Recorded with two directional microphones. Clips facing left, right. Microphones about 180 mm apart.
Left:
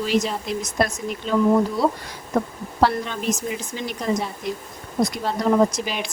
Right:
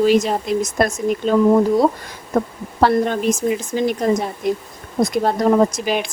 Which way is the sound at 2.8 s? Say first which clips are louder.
Right 5 dB; 50° right (ahead or behind).